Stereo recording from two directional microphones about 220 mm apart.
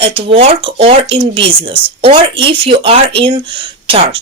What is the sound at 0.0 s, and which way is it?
Speech, 25° right (ahead or behind).